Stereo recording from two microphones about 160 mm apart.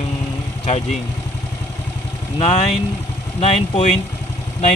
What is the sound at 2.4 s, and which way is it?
Speech, 40° left (ahead or behind).